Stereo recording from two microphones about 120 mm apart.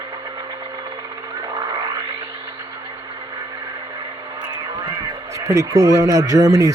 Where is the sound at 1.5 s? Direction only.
35° right (ahead or behind).